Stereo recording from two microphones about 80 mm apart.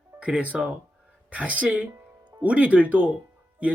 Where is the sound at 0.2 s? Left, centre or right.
Centre.